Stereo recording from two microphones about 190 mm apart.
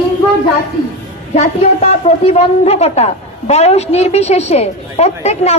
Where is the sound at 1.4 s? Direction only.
35° left (ahead or behind).